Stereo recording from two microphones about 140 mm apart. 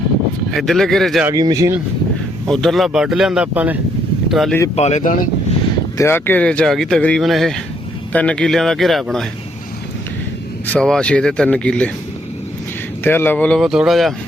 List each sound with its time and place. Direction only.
0.5 s speech: centre (ahead or behind)
1.3 s speech: 25° right (ahead or behind)
2.5 s speech: centre (ahead or behind)
4.3 s speech: centre (ahead or behind)
4.7 s speech: 50° left (ahead or behind); by 5.3 s 70° left (ahead or behind)
6.0 s speech: 15° left (ahead or behind); by 9.2 s centre (ahead or behind)
10.7 s speech: 5° left (ahead or behind)
13.1 s speech: 15° left (ahead or behind)
13.6 s speech: centre (ahead or behind)